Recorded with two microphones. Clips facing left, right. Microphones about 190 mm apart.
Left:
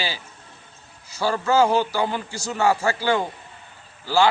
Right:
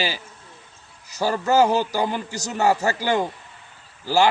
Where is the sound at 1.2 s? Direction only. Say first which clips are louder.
Right 1 dB; 40° right (ahead or behind).